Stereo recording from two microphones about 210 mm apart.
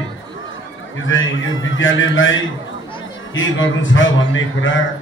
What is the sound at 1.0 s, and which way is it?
A man's voice, 65° left (ahead or behind).